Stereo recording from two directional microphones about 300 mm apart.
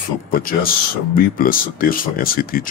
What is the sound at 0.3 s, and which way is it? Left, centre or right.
Speech, left.